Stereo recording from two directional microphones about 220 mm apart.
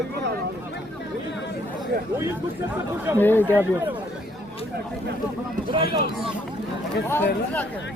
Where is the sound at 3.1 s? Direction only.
10° left (ahead or behind).